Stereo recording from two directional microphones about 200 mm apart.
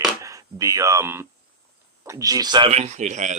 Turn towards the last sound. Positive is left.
turn(degrees=-35)  # may be behind; listen again after turning